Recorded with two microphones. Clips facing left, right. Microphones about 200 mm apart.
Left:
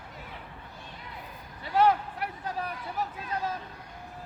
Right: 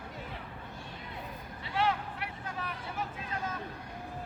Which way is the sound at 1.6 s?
40° left (ahead or behind).